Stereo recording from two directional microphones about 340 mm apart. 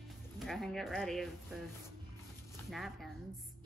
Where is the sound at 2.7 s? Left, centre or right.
Centre.